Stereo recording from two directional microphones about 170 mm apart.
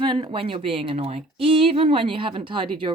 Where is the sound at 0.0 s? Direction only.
30° right (ahead or behind).